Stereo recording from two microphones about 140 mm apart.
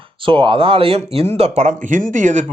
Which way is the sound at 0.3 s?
40° right (ahead or behind).